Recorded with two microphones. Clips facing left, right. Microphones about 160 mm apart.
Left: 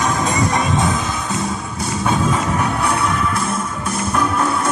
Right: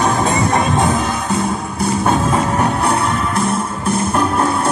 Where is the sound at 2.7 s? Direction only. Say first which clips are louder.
Right 3 dB; 35° right (ahead or behind).